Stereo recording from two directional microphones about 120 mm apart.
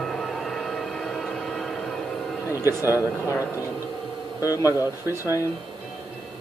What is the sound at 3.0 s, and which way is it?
Speech, 25° left (ahead or behind).